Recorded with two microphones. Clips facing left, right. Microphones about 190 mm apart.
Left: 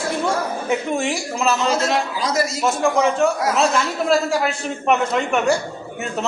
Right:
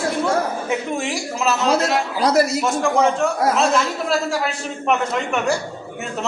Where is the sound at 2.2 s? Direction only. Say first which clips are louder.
Right 5 dB; 60° right (ahead or behind).